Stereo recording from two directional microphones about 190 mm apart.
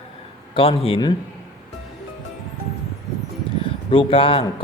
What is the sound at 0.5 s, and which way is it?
Speech, 25° left (ahead or behind).